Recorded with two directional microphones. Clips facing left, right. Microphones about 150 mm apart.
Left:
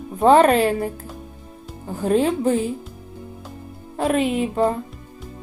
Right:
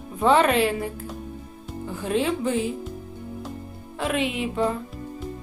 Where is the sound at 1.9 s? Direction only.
40° left (ahead or behind).